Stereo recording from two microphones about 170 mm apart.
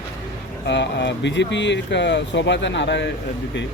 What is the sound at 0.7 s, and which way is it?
Speech, 90° left.